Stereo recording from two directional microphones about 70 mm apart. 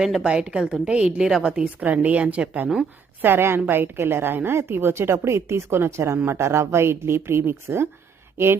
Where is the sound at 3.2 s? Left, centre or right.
Right.